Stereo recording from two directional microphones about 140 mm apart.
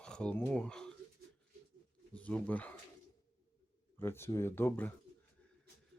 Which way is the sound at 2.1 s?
10° left (ahead or behind).